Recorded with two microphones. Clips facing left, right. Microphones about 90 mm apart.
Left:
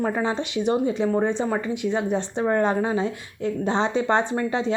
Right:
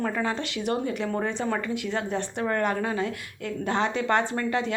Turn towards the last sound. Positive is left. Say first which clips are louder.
# left 3 dB
turn(degrees=20)  # may be behind; listen again after turning